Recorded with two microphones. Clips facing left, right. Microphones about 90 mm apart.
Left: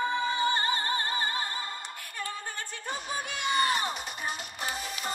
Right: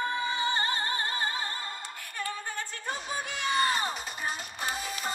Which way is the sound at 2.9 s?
5° left (ahead or behind).